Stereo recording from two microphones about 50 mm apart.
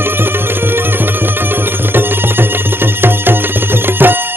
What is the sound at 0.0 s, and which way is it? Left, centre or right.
Music, right.